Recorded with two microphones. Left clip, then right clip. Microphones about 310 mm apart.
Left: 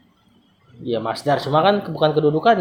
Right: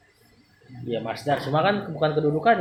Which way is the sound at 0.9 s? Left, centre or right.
Left.